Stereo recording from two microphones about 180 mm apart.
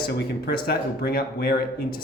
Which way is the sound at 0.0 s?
60° left (ahead or behind).